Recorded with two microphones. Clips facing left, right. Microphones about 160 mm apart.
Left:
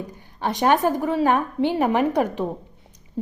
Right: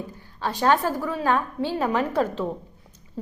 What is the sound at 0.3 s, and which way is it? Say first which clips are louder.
A woman's voice: left 2 dB; 20° left (ahead or behind).